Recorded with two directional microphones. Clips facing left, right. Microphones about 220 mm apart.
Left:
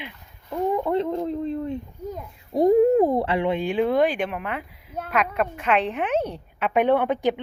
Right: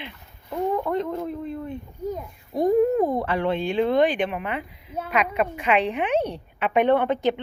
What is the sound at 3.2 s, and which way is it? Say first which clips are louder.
Speech: left 2 dB; 25° left (ahead or behind).